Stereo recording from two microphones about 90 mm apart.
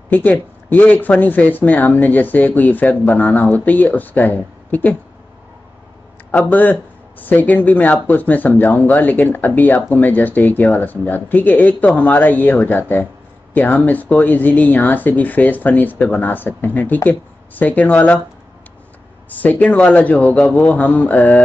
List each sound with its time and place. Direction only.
0.1 s speech: 20° left (ahead or behind)
6.3 s speech: 20° left (ahead or behind)
19.2 s a man's voice: 20° left (ahead or behind)